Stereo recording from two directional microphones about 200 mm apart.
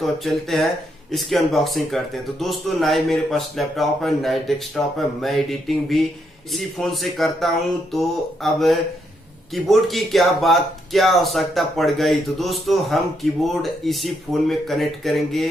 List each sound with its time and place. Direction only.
0.0 s speech: centre (ahead or behind)